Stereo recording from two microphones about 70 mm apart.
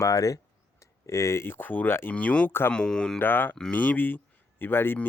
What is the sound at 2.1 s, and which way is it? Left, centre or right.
Speech, centre.